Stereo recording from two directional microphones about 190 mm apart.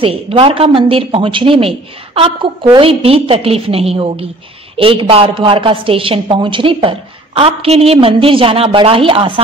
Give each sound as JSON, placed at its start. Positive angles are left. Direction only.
{"t": 0.0, "sound": "a woman's voice", "side_deg": -30}